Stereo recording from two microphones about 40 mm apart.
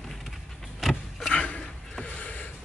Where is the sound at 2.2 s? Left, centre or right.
Left.